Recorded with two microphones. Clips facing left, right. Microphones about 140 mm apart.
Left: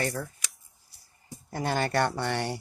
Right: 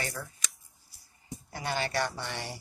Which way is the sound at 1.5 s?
45° left (ahead or behind).